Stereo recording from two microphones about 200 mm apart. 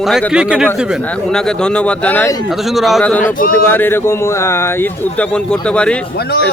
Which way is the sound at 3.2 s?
40° left (ahead or behind).